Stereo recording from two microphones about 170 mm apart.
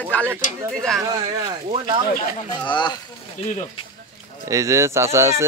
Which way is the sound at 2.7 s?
25° left (ahead or behind).